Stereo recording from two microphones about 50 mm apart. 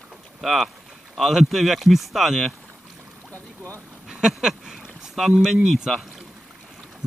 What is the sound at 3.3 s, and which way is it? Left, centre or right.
Boat, right.